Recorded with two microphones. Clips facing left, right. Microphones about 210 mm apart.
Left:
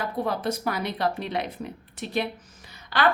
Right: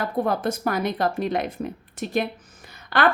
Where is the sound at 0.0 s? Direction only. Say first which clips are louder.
Right 4 dB; 50° right (ahead or behind).